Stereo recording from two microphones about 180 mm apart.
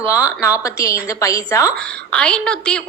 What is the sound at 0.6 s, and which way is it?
A woman's voice, 20° left (ahead or behind).